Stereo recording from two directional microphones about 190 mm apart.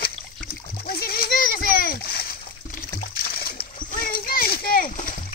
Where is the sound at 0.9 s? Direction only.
55° left (ahead or behind).